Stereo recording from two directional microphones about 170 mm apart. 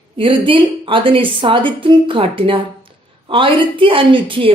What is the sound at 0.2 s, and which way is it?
Speech, 30° right (ahead or behind).